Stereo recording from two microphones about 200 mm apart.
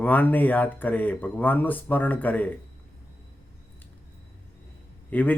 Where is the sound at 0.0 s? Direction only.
10° left (ahead or behind).